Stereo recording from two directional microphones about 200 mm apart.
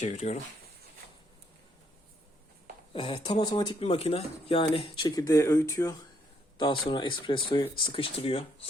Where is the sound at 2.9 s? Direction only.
25° left (ahead or behind).